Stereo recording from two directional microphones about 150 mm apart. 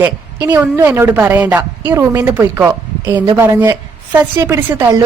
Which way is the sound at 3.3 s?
15° right (ahead or behind).